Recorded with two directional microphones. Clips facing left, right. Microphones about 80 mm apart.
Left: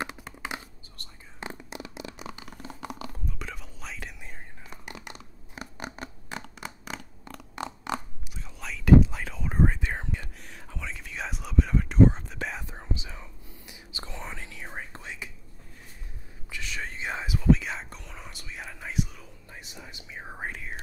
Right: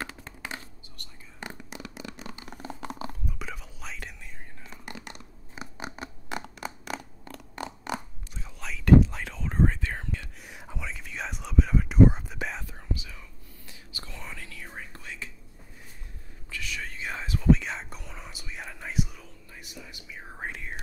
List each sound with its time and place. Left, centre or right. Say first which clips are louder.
0.0 s computer keyboard: left 3 dB; centre
0.9 s whispering: left 2 dB; left
2.7 s chewing: right 1 dB; centre
3.3 s whispering: even; centre
4.6 s scratch: right 1 dB; centre
7.2 s a sound: left 2 dB; centre
8.5 s whispering: even; centre
10.8 s whispering: even; centre
12.6 s whispering: left 1 dB; left
16.6 s whispering: left 2 dB; left
17.3 s whispering: right 1 dB; centre
19.6 s whispering: right 2 dB; left
20.3 s whispering: even; centre